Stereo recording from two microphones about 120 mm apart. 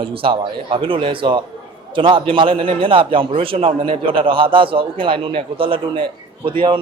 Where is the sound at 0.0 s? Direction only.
45° right (ahead or behind).